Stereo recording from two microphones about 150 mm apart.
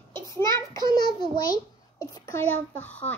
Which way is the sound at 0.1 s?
20° left (ahead or behind).